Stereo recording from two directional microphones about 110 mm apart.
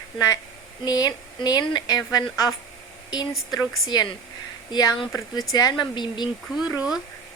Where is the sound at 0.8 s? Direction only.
35° left (ahead or behind).